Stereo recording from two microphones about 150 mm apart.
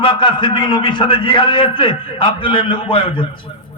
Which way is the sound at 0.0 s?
35° left (ahead or behind).